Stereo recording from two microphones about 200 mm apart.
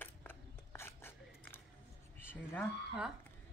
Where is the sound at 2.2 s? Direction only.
10° left (ahead or behind).